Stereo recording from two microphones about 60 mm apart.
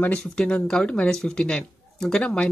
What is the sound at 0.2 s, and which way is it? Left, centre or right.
Speech, centre.